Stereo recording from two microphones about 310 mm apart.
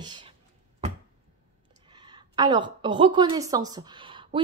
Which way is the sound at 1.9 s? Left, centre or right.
Centre.